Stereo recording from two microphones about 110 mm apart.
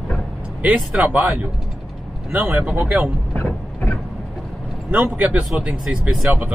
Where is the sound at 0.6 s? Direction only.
15° right (ahead or behind).